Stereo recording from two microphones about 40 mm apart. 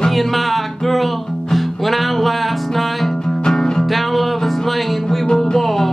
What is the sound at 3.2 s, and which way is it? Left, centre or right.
Music, centre.